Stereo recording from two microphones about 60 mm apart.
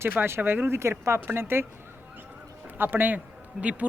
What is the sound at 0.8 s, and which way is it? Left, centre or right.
Speech, right.